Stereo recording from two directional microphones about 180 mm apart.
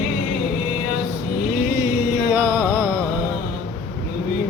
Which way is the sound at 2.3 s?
10° right (ahead or behind).